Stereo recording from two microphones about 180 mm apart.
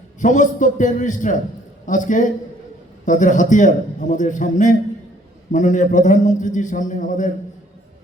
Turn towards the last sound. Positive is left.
turn(degrees=45)  # may be behind; listen again after turning